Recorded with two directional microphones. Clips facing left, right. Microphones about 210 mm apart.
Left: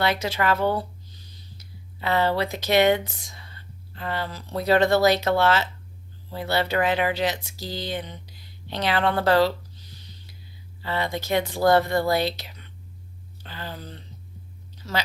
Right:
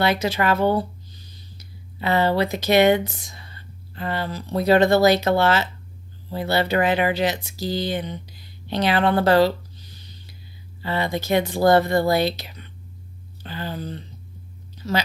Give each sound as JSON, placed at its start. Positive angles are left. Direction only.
{"t": 0.0, "sound": "speech", "side_deg": -10}
{"t": 2.0, "sound": "speech", "side_deg": -15}
{"t": 10.8, "sound": "speech", "side_deg": -10}
{"t": 11.7, "sound": "speech", "side_deg": -20}
{"t": 12.1, "sound": "speech", "side_deg": -10}
{"t": 13.4, "sound": "a sound", "side_deg": -10}